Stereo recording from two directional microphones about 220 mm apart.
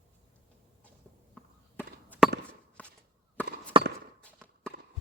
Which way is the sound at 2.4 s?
5° left (ahead or behind).